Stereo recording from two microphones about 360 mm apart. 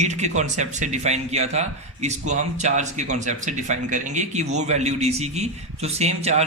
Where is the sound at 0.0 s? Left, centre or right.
Centre.